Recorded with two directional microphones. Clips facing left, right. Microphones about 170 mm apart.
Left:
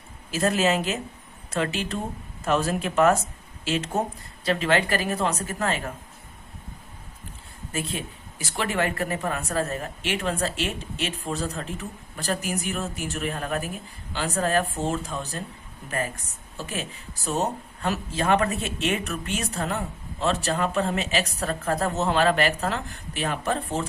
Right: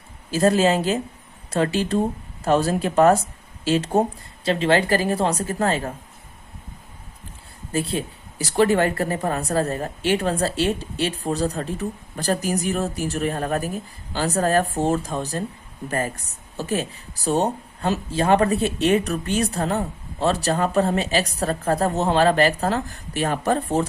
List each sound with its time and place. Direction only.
0.3 s speech: 35° right (ahead or behind)
7.7 s speech: 35° right (ahead or behind)